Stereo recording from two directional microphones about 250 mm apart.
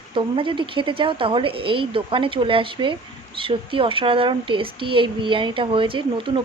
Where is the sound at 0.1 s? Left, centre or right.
Centre.